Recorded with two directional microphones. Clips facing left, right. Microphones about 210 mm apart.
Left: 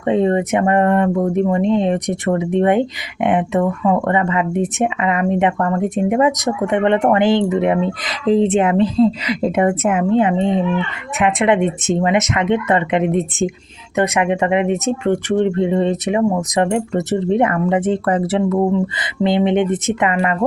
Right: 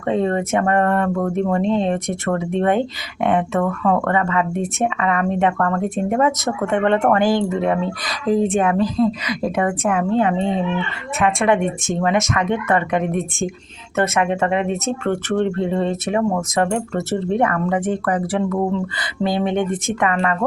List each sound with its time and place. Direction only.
0.0 s speech: 20° left (ahead or behind)